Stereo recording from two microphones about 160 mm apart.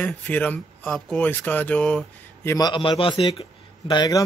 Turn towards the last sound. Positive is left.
turn(degrees=25)  # may be behind; listen again after turning